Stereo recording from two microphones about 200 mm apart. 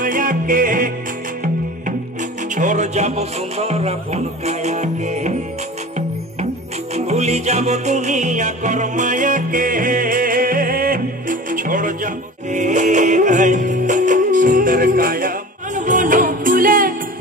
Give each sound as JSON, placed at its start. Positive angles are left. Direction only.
{"t": 0.0, "sound": "music", "side_deg": -45}
{"t": 2.5, "sound": "speech", "side_deg": -40}
{"t": 7.1, "sound": "music", "side_deg": -35}